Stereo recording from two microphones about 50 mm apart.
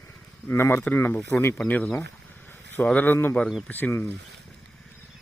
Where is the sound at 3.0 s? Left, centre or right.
Left.